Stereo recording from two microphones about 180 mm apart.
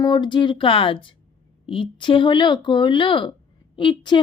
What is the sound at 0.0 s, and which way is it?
Speech, 25° left (ahead or behind).